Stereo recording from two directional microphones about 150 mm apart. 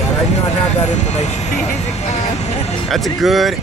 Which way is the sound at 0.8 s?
50° left (ahead or behind).